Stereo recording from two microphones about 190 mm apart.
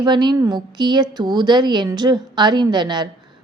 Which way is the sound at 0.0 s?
25° right (ahead or behind).